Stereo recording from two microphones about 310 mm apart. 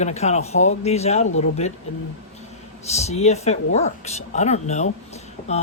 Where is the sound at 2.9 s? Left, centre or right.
Left.